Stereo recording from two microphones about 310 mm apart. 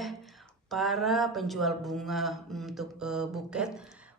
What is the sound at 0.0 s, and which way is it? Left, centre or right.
A woman's voice, centre.